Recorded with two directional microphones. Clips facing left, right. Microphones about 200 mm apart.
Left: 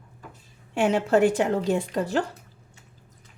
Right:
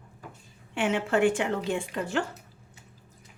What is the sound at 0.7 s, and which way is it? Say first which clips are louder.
A woman's voice: left 5 dB; 40° left (ahead or behind).